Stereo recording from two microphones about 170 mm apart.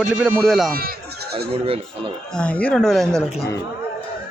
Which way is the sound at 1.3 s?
35° right (ahead or behind).